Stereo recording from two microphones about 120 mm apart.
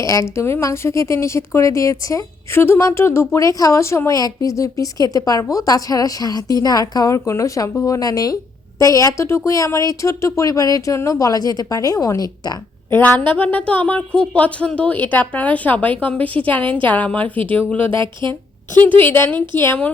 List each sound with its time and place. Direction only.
0.0 s speech: 25° left (ahead or behind)
12.9 s a woman's voice: 10° left (ahead or behind)
18.0 s a woman's voice: 40° right (ahead or behind)
18.8 s a woman's voice: 15° left (ahead or behind)